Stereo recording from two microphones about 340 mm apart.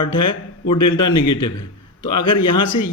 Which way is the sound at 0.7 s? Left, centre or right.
Left.